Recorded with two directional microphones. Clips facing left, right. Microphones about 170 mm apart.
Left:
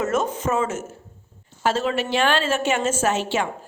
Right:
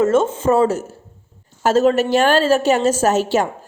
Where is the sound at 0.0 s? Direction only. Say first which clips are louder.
Right 7 dB; 30° right (ahead or behind).